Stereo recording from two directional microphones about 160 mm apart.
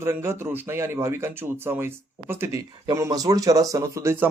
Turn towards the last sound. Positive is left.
turn(degrees=-20)  # may be behind; listen again after turning